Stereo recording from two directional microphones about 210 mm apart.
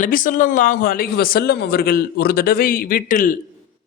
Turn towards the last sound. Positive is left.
turn(degrees=40)  # may be behind; listen again after turning